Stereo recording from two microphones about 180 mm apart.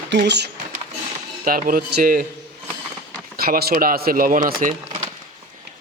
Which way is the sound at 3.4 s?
60° right (ahead or behind).